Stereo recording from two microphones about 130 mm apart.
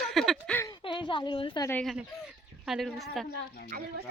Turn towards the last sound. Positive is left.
turn(degrees=0)  # may be behind; listen again after turning